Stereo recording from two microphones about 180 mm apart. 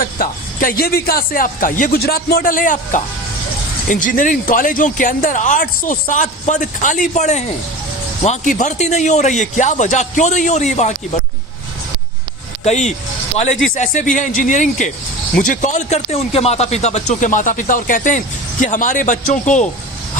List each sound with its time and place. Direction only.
0.0 s a man's voice: 50° left (ahead or behind)
12.6 s a man's voice: 40° left (ahead or behind)